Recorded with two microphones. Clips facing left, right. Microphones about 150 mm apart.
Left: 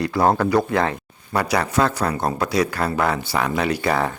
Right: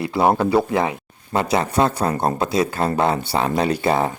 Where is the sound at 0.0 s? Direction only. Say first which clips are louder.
Right 1 dB; 20° right (ahead or behind).